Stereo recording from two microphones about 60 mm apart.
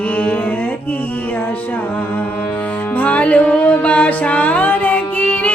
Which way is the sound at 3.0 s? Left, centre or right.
Left.